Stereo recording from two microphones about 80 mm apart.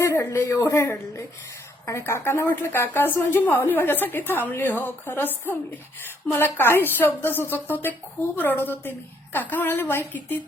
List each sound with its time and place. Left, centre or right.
0.0 s a woman's voice: left